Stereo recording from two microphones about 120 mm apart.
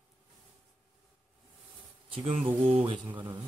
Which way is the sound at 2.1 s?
45° right (ahead or behind).